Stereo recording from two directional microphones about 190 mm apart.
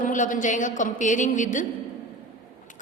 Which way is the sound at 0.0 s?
45° left (ahead or behind).